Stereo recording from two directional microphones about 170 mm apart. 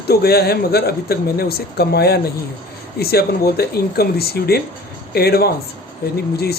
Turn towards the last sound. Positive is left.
turn(degrees=65)  # may be behind; listen again after turning